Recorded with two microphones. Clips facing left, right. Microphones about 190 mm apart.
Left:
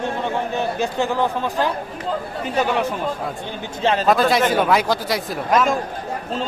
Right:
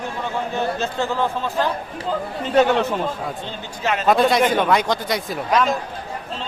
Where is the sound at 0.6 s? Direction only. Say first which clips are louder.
Even; 15° left (ahead or behind).